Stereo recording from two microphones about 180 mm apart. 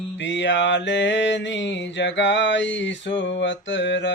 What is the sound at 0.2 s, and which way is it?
Mantra, 85° left.